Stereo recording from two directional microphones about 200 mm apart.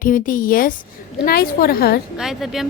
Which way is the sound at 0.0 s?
40° left (ahead or behind).